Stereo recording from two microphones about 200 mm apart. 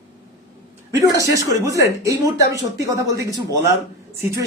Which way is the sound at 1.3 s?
15° right (ahead or behind).